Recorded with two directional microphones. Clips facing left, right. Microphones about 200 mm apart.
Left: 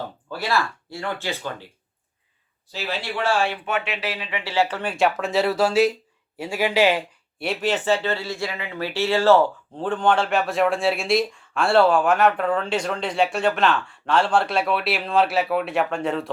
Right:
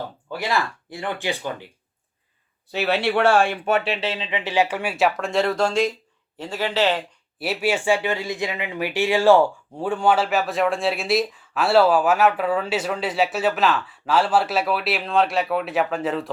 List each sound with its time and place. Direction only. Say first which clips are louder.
0.3 s speech: even; 15° right (ahead or behind)
2.7 s speech: right 7 dB; 65° right (ahead or behind); by 7.0 s 10° left (ahead or behind)
7.3 s speech: right 1 dB; 5° right (ahead or behind)